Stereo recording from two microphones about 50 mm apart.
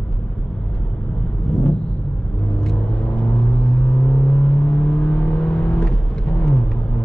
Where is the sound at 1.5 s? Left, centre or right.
Left.